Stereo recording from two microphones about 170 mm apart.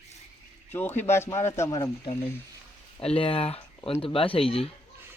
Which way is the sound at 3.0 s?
35° left (ahead or behind).